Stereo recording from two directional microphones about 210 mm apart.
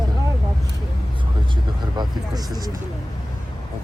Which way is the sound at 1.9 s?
20° right (ahead or behind).